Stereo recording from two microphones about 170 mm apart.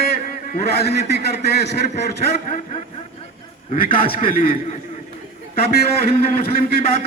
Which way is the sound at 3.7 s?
55° left (ahead or behind).